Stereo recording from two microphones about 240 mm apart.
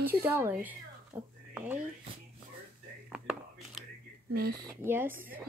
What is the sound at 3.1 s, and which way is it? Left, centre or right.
Whispering, centre.